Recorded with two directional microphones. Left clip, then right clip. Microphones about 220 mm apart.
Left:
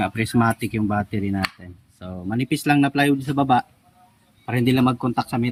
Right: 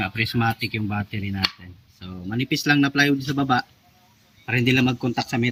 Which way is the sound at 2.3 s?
10° left (ahead or behind).